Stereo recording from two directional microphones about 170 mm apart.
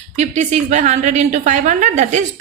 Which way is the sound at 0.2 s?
45° right (ahead or behind).